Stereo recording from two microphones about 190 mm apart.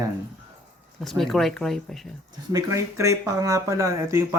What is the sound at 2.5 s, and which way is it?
Speech, 15° right (ahead or behind).